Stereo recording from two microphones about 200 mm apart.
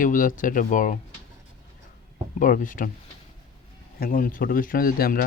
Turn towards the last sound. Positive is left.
turn(degrees=45)  # may be behind; listen again after turning